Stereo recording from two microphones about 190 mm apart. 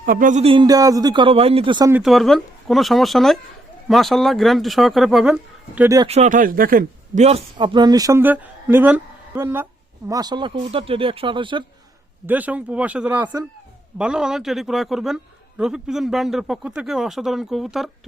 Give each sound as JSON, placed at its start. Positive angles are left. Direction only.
{"t": 0.0, "sound": "a man's voice", "side_deg": -45}
{"t": 1.9, "sound": "a man's voice", "side_deg": 0}
{"t": 6.1, "sound": "speech", "side_deg": -35}
{"t": 7.3, "sound": "a man's voice", "side_deg": -30}
{"t": 12.2, "sound": "a man's voice", "side_deg": -10}